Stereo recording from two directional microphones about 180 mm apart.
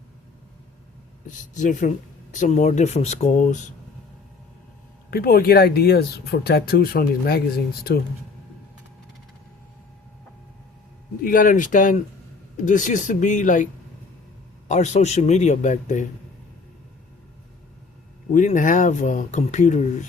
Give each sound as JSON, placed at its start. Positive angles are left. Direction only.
{"t": 1.5, "sound": "a man's voice", "side_deg": 45}
{"t": 5.1, "sound": "speech", "side_deg": 55}
{"t": 11.2, "sound": "speech", "side_deg": 50}
{"t": 14.7, "sound": "a man's voice", "side_deg": 40}
{"t": 18.3, "sound": "speech", "side_deg": 45}